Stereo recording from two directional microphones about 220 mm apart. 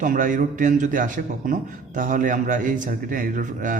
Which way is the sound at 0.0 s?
35° right (ahead or behind).